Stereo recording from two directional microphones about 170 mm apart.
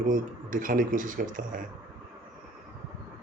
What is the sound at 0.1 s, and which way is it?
Speech, 50° right (ahead or behind).